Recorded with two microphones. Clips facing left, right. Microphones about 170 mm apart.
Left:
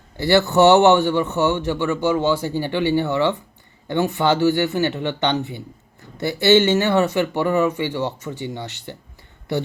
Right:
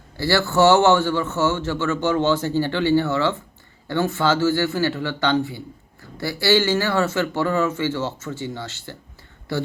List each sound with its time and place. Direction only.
0.2 s speech: 20° left (ahead or behind)